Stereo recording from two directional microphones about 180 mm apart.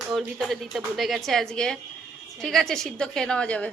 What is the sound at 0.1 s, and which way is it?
A woman's voice, centre (ahead or behind).